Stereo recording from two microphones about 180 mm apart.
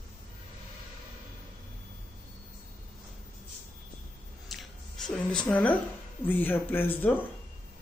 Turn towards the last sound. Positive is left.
turn(degrees=10)  # may be behind; listen again after turning